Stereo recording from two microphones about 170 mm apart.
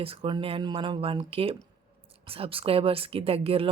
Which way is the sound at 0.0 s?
30° right (ahead or behind).